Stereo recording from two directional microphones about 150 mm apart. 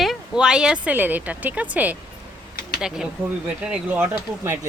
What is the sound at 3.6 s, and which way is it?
Speech, 15° right (ahead or behind).